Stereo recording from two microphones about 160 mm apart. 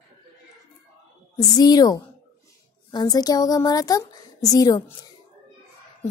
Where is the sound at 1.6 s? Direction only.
25° left (ahead or behind).